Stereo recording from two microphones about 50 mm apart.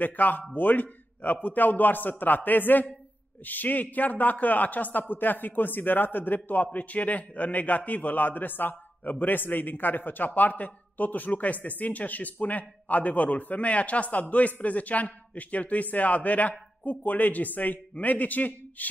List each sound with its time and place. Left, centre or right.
0.0 s a man's voice: left